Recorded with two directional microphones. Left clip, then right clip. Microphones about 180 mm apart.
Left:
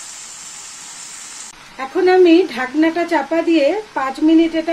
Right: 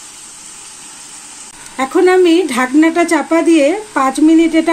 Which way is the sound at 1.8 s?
60° right (ahead or behind).